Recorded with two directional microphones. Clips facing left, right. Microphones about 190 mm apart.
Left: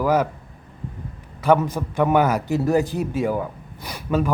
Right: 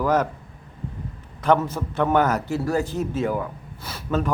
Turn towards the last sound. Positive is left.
turn(degrees=10)  # may be behind; listen again after turning